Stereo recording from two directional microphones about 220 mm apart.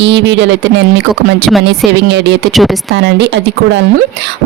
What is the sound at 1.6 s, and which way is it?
A woman's voice, 50° right (ahead or behind).